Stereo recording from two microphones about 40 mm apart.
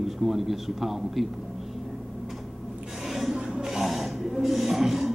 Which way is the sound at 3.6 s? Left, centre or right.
Centre.